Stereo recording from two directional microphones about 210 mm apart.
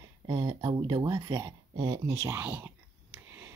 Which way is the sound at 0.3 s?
20° right (ahead or behind).